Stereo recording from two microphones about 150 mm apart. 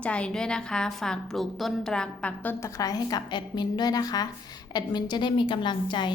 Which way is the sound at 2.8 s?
25° left (ahead or behind).